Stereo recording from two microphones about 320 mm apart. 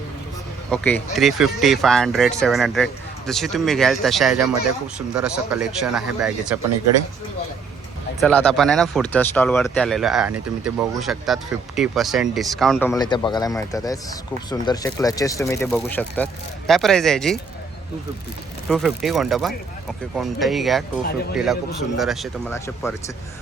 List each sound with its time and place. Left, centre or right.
0.7 s speech: centre
8.2 s speech: centre
18.7 s speech: centre